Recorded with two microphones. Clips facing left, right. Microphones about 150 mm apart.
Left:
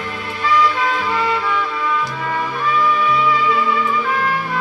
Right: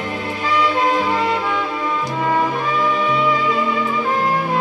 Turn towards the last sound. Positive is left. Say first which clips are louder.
# right 2 dB
turn(degrees=-25)  # may be behind; listen again after turning